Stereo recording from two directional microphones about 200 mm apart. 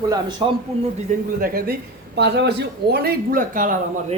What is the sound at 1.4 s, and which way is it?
Speech, 45° right (ahead or behind).